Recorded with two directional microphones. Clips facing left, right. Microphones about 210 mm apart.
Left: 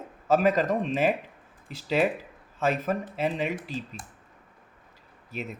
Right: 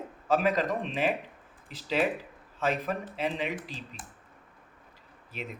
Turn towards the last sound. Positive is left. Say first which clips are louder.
# left 4 dB
turn(degrees=45)  # may be behind; listen again after turning